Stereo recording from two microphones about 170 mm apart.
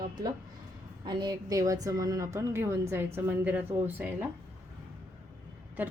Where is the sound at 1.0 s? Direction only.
25° right (ahead or behind).